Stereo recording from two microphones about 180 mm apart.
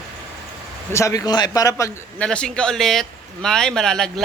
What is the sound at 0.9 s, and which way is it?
Speech, 15° left (ahead or behind).